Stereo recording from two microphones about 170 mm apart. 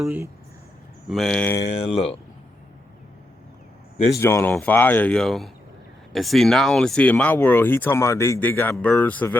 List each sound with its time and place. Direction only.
0.0 s speech: 10° right (ahead or behind)
1.0 s speech: centre (ahead or behind)
1.7 s speech: 35° left (ahead or behind)
4.2 s speech: 15° left (ahead or behind)